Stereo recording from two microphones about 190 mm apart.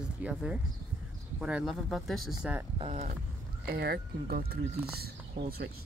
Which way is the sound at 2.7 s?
30° right (ahead or behind).